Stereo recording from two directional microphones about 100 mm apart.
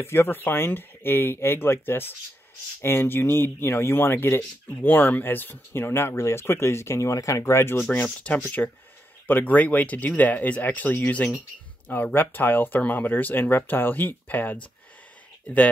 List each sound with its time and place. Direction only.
0.0 s speech: 25° left (ahead or behind)